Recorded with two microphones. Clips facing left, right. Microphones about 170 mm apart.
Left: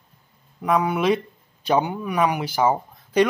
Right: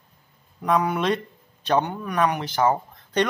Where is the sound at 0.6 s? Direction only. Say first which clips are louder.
Left 2 dB; 5° left (ahead or behind).